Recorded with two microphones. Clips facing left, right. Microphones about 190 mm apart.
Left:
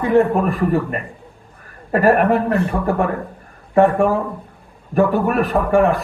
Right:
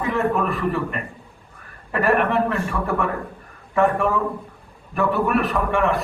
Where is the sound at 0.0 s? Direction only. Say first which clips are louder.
Left 7 dB; 35° left (ahead or behind).